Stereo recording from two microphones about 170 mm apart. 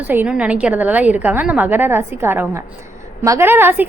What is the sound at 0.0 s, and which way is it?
A woman's voice, 10° right (ahead or behind).